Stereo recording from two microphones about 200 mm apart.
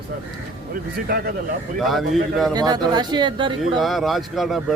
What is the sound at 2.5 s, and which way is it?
Speech, 20° right (ahead or behind).